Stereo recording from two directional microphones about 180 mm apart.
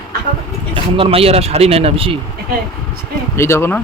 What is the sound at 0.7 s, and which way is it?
Speech, 30° right (ahead or behind).